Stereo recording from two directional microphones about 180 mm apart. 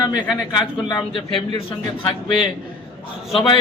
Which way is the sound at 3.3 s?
30° left (ahead or behind).